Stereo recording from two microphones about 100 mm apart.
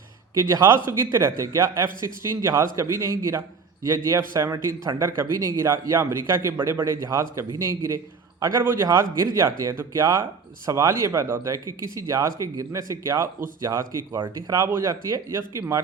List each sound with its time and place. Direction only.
0.3 s speech: 30° right (ahead or behind)
7.9 s a sound: 35° right (ahead or behind)
8.6 s speech: 30° right (ahead or behind)
14.2 s speech: 45° right (ahead or behind)
14.6 s speech: 25° right (ahead or behind)